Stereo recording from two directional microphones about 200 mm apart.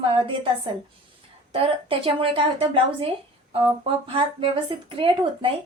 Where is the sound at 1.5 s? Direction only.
25° right (ahead or behind).